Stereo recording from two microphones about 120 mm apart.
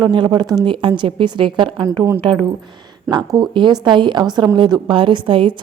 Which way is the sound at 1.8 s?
25° right (ahead or behind).